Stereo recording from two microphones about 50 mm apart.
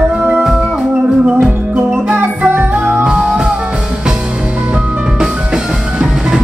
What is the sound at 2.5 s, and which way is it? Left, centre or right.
Music, right.